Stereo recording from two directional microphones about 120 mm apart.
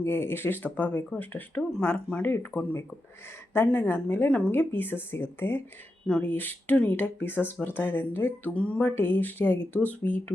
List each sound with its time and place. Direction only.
0.0 s speech: 20° left (ahead or behind)